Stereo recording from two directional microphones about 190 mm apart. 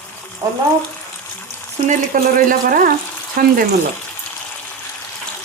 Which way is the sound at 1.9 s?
45° right (ahead or behind).